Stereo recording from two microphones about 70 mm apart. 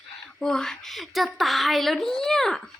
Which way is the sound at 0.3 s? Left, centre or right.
Centre.